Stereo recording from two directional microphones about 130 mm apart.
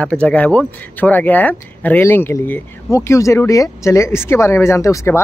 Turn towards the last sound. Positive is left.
turn(degrees=25)  # may be behind; listen again after turning